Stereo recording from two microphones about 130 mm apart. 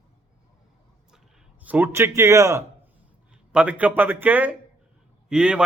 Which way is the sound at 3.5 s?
10° right (ahead or behind).